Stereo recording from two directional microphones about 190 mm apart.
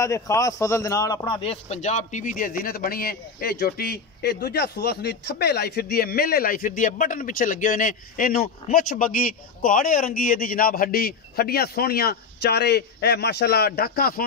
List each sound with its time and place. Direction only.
0.0 s a man's voice: 15° left (ahead or behind)
1.3 s a man's voice: 30° left (ahead or behind); by 14.2 s 50° left (ahead or behind)